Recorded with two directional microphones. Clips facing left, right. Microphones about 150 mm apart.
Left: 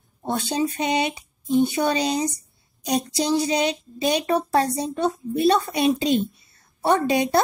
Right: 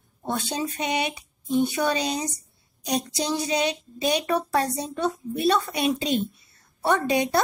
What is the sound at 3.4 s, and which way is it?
Speech, 30° left (ahead or behind).